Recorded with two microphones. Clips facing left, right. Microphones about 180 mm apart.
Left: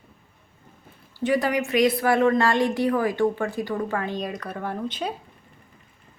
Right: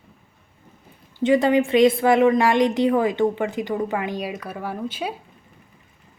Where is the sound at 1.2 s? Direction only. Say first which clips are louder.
Right 5 dB; 25° right (ahead or behind); by 5.1 s 5° right (ahead or behind).